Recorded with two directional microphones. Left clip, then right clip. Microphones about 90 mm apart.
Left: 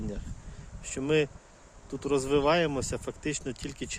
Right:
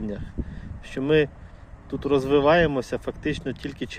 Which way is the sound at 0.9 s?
15° left (ahead or behind).